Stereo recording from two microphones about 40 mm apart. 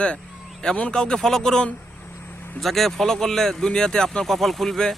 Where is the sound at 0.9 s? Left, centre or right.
Left.